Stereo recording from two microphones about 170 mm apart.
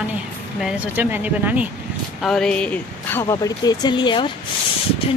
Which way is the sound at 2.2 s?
5° left (ahead or behind).